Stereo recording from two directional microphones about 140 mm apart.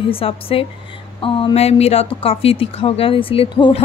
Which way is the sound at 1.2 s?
40° left (ahead or behind).